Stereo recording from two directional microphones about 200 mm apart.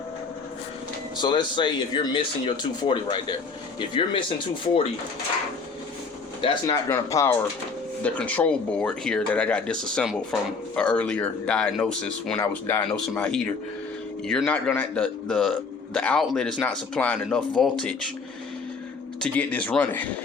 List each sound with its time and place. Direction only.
1.2 s speech: 25° left (ahead or behind)
6.4 s a man's voice: 25° left (ahead or behind); by 17.9 s 5° left (ahead or behind)
19.2 s speech: 10° left (ahead or behind)